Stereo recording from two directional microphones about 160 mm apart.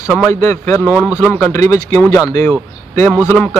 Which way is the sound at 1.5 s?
20° left (ahead or behind).